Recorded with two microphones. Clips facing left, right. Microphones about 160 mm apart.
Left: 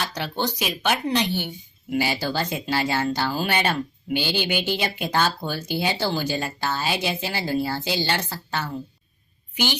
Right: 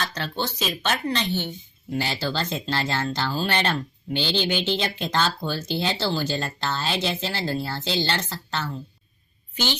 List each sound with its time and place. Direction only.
0.0 s speech: 10° left (ahead or behind)